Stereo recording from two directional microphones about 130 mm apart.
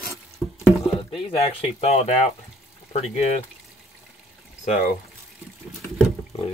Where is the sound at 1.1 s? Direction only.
45° left (ahead or behind).